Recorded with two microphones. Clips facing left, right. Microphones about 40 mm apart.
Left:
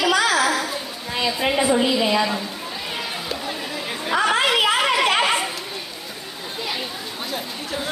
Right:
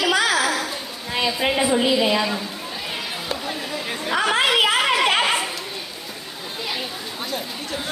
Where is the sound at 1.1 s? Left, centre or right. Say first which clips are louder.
Even; centre.